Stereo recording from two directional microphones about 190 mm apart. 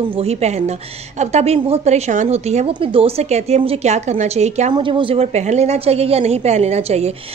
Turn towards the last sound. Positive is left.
turn(degrees=-35)  # may be behind; listen again after turning